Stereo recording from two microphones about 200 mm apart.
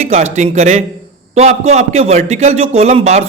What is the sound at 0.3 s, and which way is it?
A man's voice, 35° right (ahead or behind).